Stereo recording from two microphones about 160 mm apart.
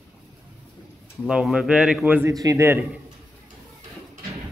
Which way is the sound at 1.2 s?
5° right (ahead or behind).